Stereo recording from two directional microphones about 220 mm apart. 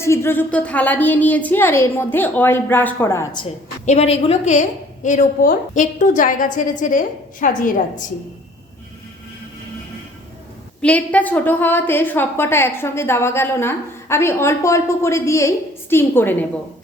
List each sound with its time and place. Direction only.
0.0 s a woman's voice: 10° left (ahead or behind)
3.4 s a woman's voice: 30° left (ahead or behind)
10.8 s a woman's voice: 5° left (ahead or behind)